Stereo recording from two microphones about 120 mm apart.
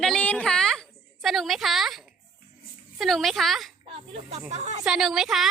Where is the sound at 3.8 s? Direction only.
50° right (ahead or behind).